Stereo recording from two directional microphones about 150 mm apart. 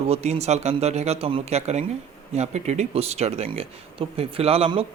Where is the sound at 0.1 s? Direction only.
45° right (ahead or behind).